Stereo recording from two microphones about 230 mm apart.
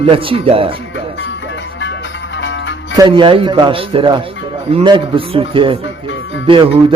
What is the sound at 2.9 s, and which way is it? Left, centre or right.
A man's voice, centre.